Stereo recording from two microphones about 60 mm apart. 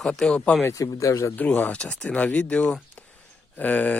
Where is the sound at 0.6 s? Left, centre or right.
Left.